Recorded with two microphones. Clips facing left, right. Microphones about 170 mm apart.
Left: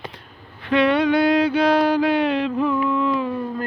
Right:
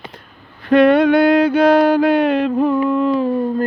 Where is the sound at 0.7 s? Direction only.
50° right (ahead or behind).